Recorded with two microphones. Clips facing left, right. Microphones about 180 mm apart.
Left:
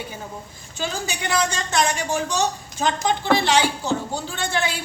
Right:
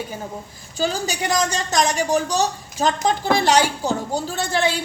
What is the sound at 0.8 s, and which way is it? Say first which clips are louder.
A woman's voice: right 5 dB; 40° right (ahead or behind).